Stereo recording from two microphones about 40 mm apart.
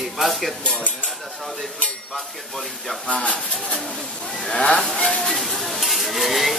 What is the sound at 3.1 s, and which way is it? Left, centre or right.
Speech, left.